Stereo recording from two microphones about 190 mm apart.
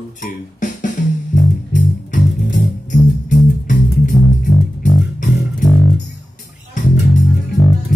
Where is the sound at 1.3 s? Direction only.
40° left (ahead or behind).